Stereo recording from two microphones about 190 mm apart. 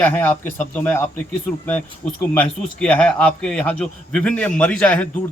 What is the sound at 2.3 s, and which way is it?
A man's voice, 5° left (ahead or behind).